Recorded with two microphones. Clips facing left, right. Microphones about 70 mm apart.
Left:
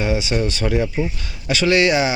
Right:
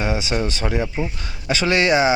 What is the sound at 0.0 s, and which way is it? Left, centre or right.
Speech, right.